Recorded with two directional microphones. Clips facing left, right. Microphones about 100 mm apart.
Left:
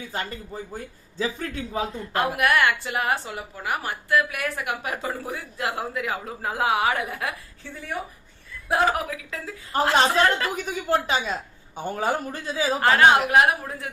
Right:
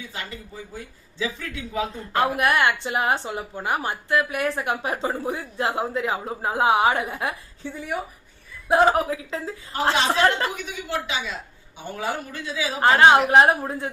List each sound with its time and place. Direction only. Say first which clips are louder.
0.1 s a man's voice: left 4 dB; 45° left (ahead or behind)
2.1 s a woman's voice: right 1 dB; 30° right (ahead or behind)
10.5 s a man's voice: left 5 dB; 40° left (ahead or behind)
12.8 s a woman's voice: right 3 dB; 25° right (ahead or behind)